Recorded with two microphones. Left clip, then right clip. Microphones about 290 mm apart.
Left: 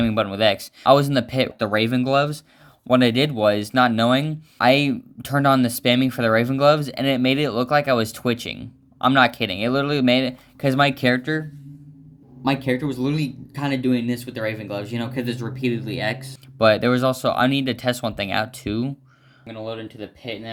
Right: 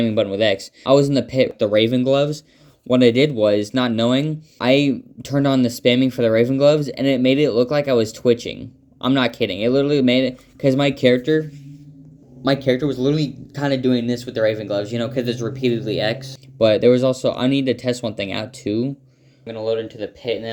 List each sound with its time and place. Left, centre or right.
0.0 s speech: left
12.6 s speech: centre
16.6 s speech: left
19.5 s speech: centre